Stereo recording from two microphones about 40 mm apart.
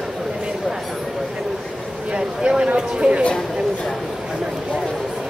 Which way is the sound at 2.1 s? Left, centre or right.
Right.